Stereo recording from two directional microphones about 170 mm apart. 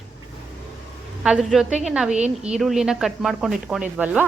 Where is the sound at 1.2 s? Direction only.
5° right (ahead or behind).